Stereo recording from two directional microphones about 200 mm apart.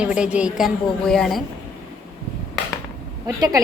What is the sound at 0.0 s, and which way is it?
A woman's voice, 5° right (ahead or behind).